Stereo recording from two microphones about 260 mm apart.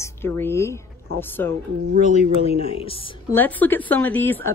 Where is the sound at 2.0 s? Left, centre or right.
Left.